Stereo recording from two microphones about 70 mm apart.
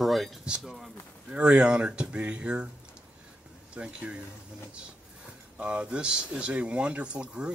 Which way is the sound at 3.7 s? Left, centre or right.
Centre.